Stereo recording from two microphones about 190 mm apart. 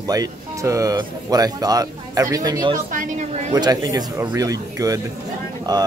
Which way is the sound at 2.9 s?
45° right (ahead or behind).